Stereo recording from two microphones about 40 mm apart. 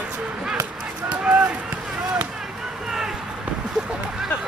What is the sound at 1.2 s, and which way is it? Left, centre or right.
Run, right.